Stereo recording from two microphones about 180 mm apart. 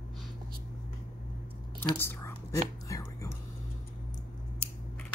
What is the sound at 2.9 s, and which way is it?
Speech, 15° left (ahead or behind).